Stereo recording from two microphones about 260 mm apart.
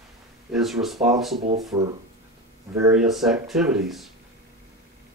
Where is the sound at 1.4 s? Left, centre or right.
Right.